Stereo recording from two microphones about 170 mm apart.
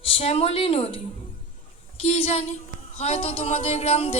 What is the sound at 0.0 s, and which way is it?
A woman's voice, 35° left (ahead or behind).